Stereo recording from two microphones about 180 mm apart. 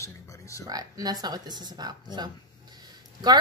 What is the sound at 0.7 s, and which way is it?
Speech, 20° right (ahead or behind).